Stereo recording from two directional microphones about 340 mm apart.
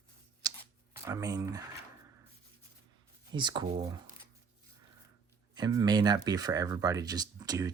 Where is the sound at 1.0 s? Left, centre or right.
Centre.